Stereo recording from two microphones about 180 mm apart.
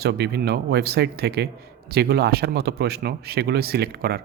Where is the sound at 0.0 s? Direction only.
65° right (ahead or behind).